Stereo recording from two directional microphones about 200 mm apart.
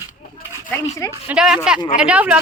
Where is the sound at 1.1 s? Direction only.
5° right (ahead or behind).